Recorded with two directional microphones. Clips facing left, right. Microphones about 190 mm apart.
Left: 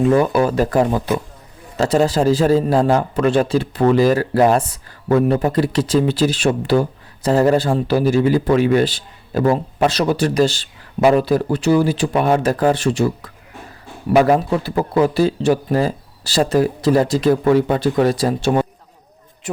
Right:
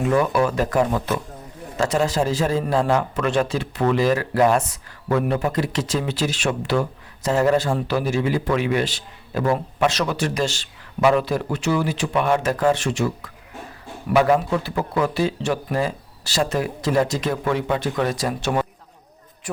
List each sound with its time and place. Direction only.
0.1 s a man's voice: 35° left (ahead or behind)